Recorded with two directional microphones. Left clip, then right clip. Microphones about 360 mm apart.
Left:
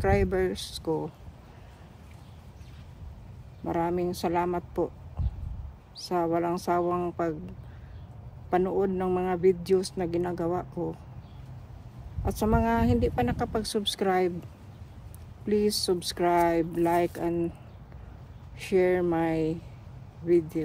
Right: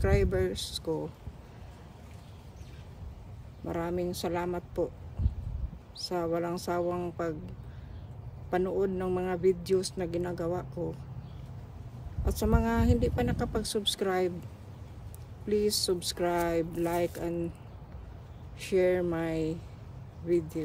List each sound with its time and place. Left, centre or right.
0.0 s speech: centre
3.6 s speech: centre
5.9 s speech: centre
8.5 s speech: centre
12.3 s speech: centre
15.4 s speech: centre
18.6 s speech: centre